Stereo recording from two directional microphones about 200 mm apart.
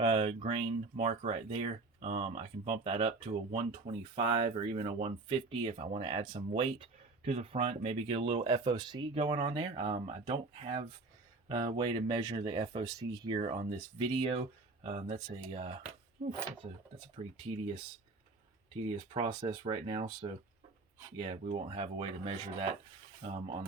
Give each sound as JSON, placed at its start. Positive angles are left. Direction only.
{"t": 0.0, "sound": "speech", "side_deg": -30}
{"t": 19.1, "sound": "speech", "side_deg": -25}